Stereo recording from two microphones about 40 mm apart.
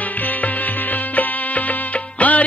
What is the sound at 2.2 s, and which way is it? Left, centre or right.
Music, left.